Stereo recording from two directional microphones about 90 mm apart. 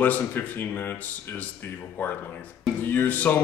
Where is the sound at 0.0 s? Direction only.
20° left (ahead or behind).